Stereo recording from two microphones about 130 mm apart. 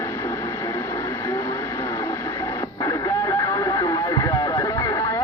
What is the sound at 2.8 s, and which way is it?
Radio, 30° left (ahead or behind).